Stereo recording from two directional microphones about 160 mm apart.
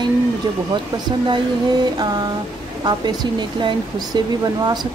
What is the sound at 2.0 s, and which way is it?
Speech, 25° right (ahead or behind).